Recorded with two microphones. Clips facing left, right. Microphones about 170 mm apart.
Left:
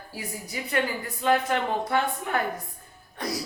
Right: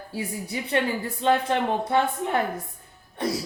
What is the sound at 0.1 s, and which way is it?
A woman's voice, 30° right (ahead or behind).